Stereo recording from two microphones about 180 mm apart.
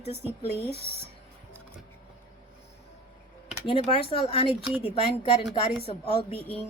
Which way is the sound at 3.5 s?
30° left (ahead or behind).